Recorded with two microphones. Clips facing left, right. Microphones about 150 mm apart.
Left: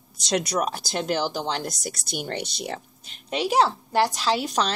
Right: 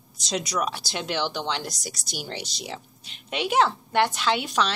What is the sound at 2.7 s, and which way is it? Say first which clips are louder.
A woman's voice: left 3 dB; 45° left (ahead or behind).